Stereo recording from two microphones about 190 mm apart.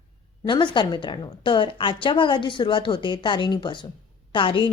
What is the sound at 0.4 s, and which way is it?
A woman's voice, 25° left (ahead or behind).